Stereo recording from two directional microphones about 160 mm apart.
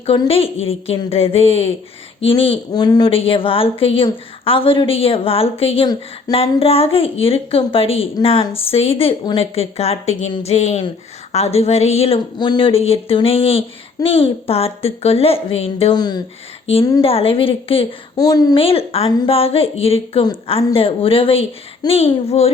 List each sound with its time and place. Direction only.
0.0 s a woman's voice: 35° left (ahead or behind)
16.7 s a woman's voice: 35° left (ahead or behind)
18.2 s speech: 25° left (ahead or behind)
18.6 s a woman's voice: 35° left (ahead or behind)